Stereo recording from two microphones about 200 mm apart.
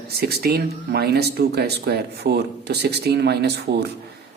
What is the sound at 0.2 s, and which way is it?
Speech, 50° right (ahead or behind).